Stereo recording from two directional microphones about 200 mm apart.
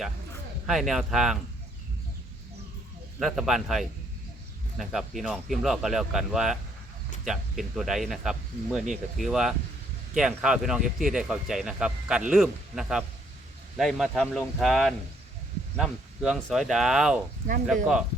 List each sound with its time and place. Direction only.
0.7 s speech: centre (ahead or behind)
3.2 s speech: centre (ahead or behind)
17.4 s speech: 40° right (ahead or behind)